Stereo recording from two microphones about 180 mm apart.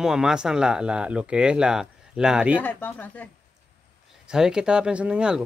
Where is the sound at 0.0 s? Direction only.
5° right (ahead or behind).